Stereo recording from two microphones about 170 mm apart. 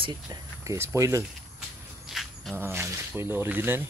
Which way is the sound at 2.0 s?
Centre (ahead or behind).